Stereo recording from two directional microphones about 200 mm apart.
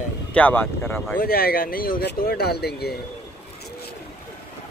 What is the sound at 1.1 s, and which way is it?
Speech, 50° left (ahead or behind).